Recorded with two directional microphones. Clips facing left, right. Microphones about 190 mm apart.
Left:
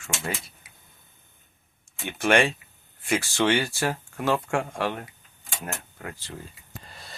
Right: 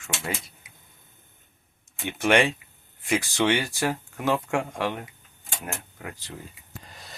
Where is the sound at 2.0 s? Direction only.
15° right (ahead or behind).